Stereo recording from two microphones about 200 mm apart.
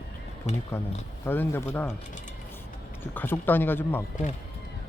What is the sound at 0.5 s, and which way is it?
Speech, 35° left (ahead or behind).